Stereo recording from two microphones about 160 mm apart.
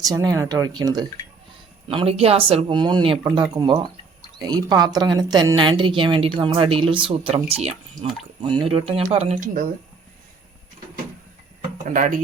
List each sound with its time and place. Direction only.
0.0 s speech: 20° right (ahead or behind)
1.9 s a woman's voice: 35° right (ahead or behind)
11.9 s speech: 55° right (ahead or behind)